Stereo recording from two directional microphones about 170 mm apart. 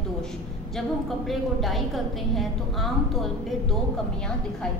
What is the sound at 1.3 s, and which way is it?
A woman's voice, centre (ahead or behind).